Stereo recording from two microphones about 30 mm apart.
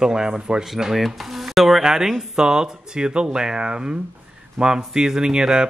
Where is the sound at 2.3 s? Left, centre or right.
Right.